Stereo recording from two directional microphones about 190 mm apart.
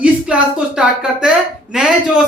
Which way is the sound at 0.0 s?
5° right (ahead or behind).